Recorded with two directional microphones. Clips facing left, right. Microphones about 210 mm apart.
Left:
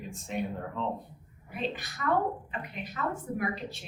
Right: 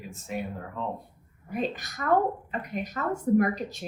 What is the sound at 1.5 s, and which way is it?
Speech, 45° right (ahead or behind).